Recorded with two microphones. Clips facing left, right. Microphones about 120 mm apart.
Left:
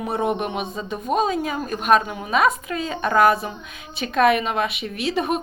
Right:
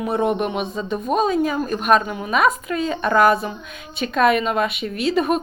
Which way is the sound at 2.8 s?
40° right (ahead or behind).